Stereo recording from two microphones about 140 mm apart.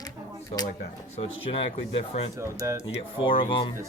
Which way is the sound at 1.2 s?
40° left (ahead or behind).